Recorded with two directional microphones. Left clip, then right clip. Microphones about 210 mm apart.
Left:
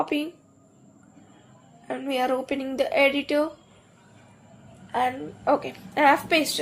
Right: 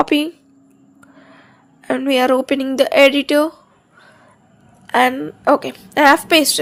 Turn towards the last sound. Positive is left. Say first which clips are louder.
# right 8 dB
turn(degrees=-30)  # may be behind; listen again after turning